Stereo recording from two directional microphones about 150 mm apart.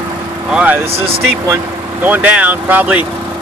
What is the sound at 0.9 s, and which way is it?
Speech, 40° right (ahead or behind).